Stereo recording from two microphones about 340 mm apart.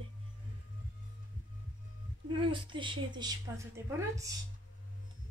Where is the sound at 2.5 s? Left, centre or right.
Centre.